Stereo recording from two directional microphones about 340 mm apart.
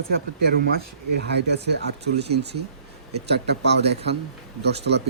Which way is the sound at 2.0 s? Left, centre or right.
Right.